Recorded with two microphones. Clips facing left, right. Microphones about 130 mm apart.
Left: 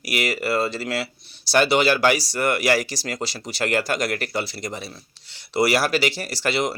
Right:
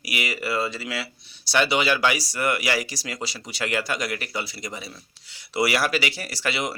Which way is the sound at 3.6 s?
50° left (ahead or behind).